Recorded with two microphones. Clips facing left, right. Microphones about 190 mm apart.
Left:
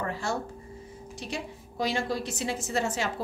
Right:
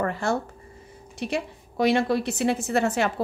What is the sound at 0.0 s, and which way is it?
A woman's voice, 55° right (ahead or behind).